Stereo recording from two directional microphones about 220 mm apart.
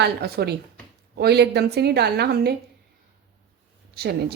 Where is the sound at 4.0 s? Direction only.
45° right (ahead or behind).